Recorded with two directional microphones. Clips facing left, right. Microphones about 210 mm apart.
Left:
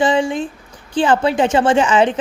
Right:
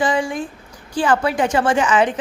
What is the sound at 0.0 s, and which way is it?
A woman's voice, 25° left (ahead or behind).